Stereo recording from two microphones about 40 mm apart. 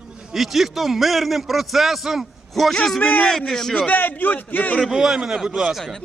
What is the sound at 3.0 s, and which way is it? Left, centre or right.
Speech, left.